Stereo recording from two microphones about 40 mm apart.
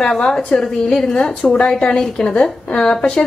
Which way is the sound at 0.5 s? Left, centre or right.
Centre.